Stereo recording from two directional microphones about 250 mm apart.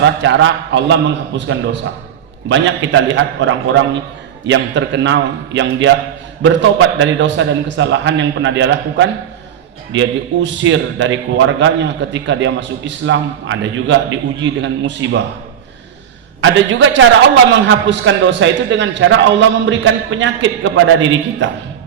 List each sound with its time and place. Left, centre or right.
0.0 s a man's voice: right
16.4 s a man's voice: right